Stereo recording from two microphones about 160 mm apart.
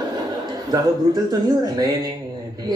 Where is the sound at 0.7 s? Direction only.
25° right (ahead or behind).